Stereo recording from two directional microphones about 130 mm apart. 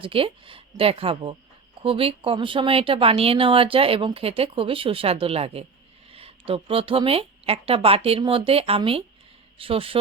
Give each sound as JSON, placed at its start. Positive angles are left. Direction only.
{"t": 0.0, "sound": "a woman's voice", "side_deg": -45}